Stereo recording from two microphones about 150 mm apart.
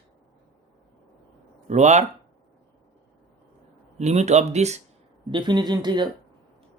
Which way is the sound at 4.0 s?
50° right (ahead or behind).